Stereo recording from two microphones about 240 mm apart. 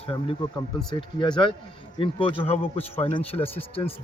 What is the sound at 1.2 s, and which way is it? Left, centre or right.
Speech, centre.